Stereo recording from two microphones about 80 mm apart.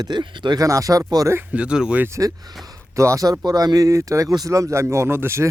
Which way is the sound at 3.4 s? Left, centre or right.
Right.